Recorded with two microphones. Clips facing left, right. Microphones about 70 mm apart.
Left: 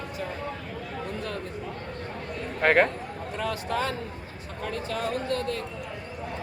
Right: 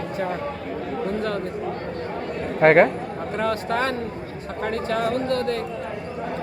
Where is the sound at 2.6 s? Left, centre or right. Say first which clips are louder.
Right 7 dB; right.